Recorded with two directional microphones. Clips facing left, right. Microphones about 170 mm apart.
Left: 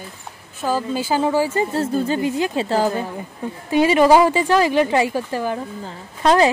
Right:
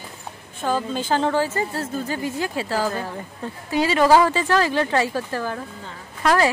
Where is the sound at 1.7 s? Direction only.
25° left (ahead or behind).